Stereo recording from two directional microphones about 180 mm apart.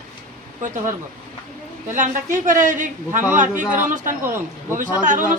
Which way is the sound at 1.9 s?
45° right (ahead or behind).